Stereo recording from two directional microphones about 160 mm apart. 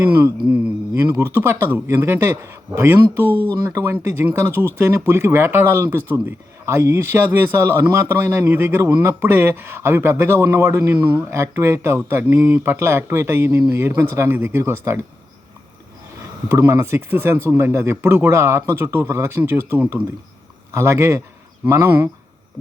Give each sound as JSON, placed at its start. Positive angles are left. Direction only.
{"t": 0.0, "sound": "speech", "side_deg": -15}
{"t": 11.2, "sound": "speech", "side_deg": -15}
{"t": 16.5, "sound": "speech", "side_deg": -20}